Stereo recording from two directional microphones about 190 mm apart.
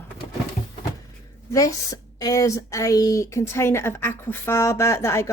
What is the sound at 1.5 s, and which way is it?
A woman's voice, 20° left (ahead or behind).